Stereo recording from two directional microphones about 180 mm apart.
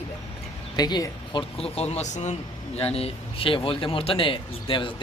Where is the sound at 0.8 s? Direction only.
20° left (ahead or behind).